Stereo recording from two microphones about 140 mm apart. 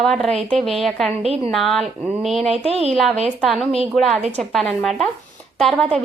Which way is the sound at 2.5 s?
45° right (ahead or behind).